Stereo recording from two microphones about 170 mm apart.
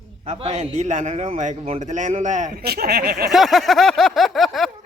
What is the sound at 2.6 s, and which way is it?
Speech, 65° right (ahead or behind).